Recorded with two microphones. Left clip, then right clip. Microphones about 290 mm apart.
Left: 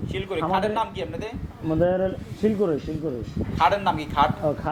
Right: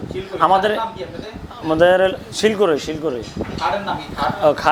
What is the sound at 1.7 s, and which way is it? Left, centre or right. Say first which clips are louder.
Speech: right 9 dB; centre.